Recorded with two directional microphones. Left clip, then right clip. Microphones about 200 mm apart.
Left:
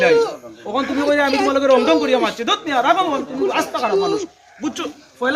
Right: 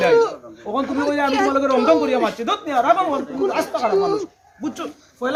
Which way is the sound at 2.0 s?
55° right (ahead or behind).